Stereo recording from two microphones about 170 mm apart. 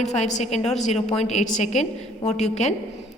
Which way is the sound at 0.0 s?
40° left (ahead or behind).